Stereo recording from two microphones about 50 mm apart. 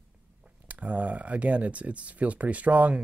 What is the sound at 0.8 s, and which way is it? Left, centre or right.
Speech, right.